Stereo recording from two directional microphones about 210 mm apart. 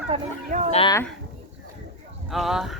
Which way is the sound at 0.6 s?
30° left (ahead or behind).